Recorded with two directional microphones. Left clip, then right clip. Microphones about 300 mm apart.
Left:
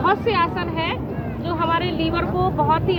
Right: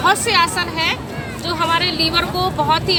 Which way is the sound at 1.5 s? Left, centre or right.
Right.